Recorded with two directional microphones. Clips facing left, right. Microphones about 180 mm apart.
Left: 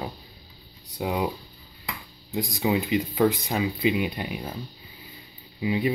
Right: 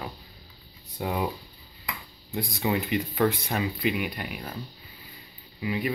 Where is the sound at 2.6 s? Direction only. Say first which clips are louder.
Left 3 dB; 5° left (ahead or behind).